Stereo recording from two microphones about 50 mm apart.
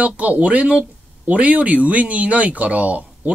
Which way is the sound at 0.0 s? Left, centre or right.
Right.